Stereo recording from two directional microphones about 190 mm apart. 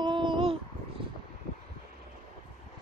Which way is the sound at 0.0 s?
25° right (ahead or behind).